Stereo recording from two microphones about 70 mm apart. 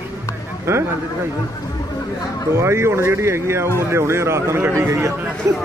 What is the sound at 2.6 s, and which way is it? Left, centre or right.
Speech, right.